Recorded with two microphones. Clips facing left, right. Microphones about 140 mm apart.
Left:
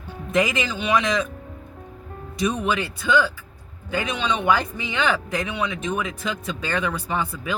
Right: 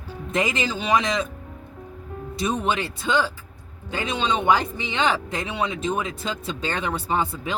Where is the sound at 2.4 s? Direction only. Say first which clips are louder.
Left 1 dB; 30° right (ahead or behind).